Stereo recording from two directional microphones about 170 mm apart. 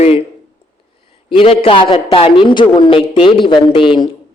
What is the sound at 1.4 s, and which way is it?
A man's voice, 30° left (ahead or behind).